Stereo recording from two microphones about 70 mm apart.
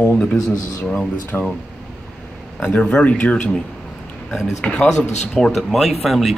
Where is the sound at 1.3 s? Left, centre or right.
Centre.